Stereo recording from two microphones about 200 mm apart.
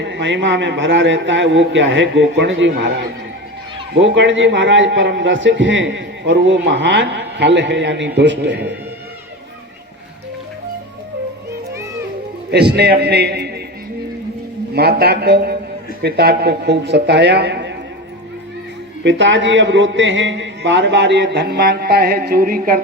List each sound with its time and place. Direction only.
0.0 s a man's voice: 60° right (ahead or behind)
12.5 s a man's voice: 55° right (ahead or behind)
14.7 s a man's voice: 50° right (ahead or behind)
19.0 s a man's voice: 65° right (ahead or behind); by 22.8 s 45° right (ahead or behind)